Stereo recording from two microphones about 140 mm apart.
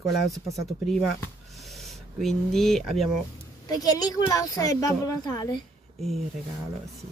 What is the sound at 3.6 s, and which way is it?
A woman's voice, 25° left (ahead or behind).